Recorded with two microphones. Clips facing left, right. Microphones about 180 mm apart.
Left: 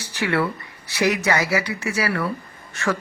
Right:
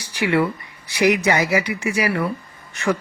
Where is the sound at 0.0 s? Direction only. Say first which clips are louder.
Right 3 dB; 15° right (ahead or behind).